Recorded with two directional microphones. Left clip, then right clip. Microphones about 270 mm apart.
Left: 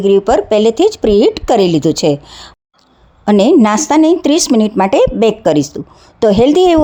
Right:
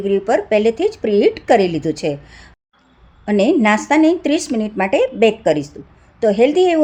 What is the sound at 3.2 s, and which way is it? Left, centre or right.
A woman's voice, left.